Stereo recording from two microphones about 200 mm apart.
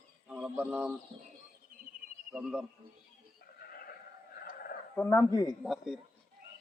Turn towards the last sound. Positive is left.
turn(degrees=0)  # may be behind; listen again after turning